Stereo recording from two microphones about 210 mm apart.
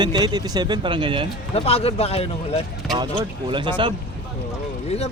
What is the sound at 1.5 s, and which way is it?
Speech, 30° left (ahead or behind).